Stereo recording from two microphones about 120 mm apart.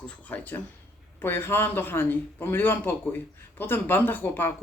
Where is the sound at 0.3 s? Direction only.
15° left (ahead or behind).